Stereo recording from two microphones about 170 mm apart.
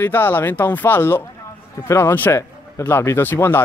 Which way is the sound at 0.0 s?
10° left (ahead or behind).